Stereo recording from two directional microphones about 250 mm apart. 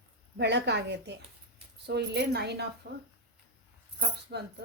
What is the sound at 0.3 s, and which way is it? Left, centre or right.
A woman's voice, right.